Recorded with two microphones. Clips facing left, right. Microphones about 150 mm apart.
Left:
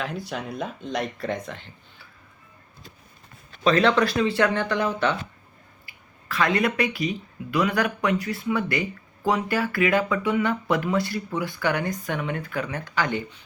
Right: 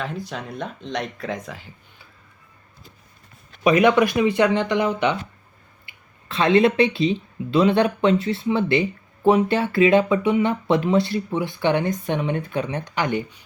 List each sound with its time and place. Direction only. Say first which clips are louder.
0.3 s speech: even; 5° left (ahead or behind)
3.6 s speech: right 4 dB; 15° right (ahead or behind)